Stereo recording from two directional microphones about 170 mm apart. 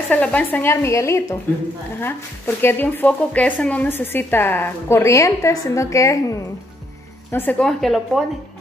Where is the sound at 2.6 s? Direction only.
10° left (ahead or behind).